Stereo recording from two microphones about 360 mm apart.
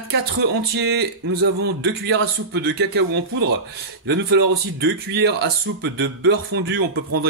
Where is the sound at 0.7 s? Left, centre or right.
Right.